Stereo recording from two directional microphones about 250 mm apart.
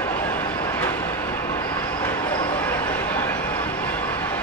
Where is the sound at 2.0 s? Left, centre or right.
Centre.